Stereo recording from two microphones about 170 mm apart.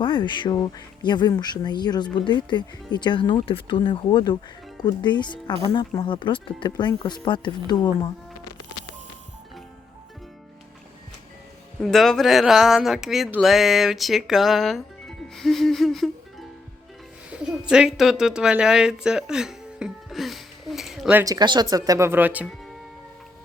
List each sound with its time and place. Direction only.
0.0 s speech: 30° left (ahead or behind)
11.8 s speech: centre (ahead or behind)
17.7 s speech: 5° right (ahead or behind)
21.2 s speech: 25° right (ahead or behind); by 22.4 s 10° right (ahead or behind)